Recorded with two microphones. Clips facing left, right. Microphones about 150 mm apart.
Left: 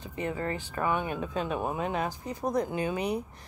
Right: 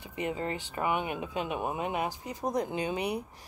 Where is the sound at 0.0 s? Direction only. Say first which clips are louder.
Left 1 dB; 15° right (ahead or behind).